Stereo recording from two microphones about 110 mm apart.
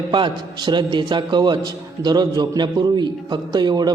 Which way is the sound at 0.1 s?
45° right (ahead or behind).